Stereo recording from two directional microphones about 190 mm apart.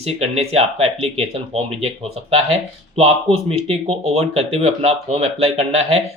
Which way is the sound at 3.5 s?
30° right (ahead or behind).